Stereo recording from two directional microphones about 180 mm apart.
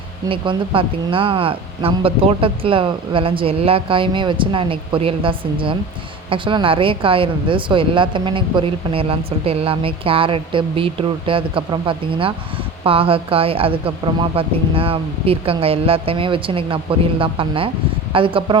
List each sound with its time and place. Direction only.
0.3 s speech: 30° right (ahead or behind)